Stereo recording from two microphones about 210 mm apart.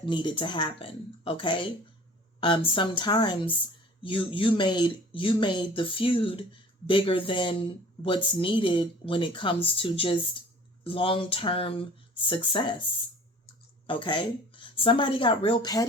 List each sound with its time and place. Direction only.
0.0 s speech: 25° left (ahead or behind)
13.8 s a woman's voice: 25° left (ahead or behind)